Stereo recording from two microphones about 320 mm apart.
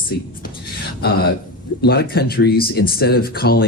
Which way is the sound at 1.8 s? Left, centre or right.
Left.